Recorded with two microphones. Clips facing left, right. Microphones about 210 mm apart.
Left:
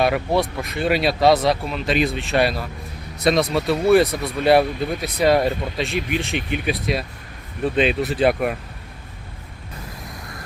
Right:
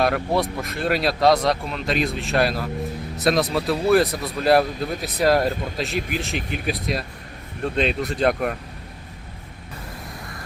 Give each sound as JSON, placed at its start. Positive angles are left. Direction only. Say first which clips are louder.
{"t": 0.0, "sound": "speech", "louder": "left 2 dB", "side_deg": 0}